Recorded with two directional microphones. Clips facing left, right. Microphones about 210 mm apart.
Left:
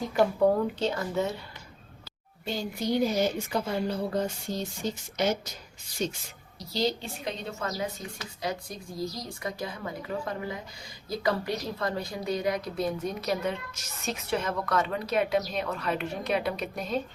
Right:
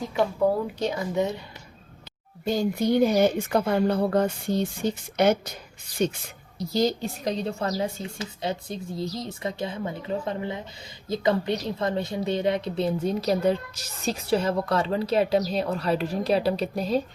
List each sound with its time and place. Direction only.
0.0 s speech: centre (ahead or behind)
0.8 s speech: 15° right (ahead or behind)
2.4 s speech: 45° right (ahead or behind)
6.6 s a woman's voice: 45° right (ahead or behind)